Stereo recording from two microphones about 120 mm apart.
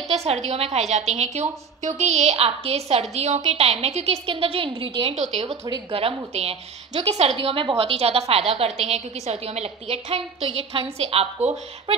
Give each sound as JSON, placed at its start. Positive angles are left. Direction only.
{"t": 0.1, "sound": "a woman's voice", "side_deg": -65}
{"t": 5.1, "sound": "speech", "side_deg": -70}
{"t": 5.7, "sound": "a woman's voice", "side_deg": -50}